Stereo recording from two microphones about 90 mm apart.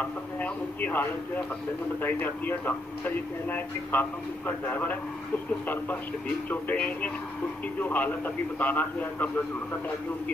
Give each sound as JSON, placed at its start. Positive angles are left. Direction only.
{"t": 0.0, "sound": "a man's voice", "side_deg": 20}